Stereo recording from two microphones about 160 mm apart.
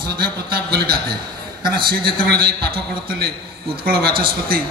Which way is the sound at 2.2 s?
70° right (ahead or behind).